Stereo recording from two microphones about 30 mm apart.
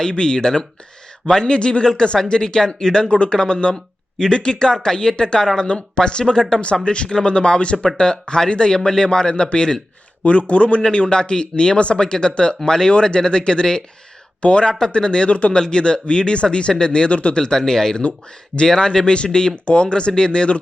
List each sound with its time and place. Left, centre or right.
0.0 s speech: left
1.8 s speech: centre
3.1 s speech: left
6.8 s speech: left
10.2 s speech: left
15.3 s speech: left
15.5 s speech: left
17.1 s speech: left
17.4 s speech: centre
18.8 s speech: left